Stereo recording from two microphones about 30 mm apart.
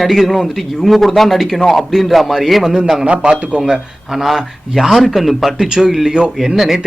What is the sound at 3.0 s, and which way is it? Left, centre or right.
Speech, right.